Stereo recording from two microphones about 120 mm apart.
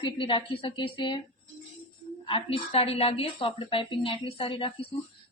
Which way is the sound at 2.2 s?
50° left (ahead or behind).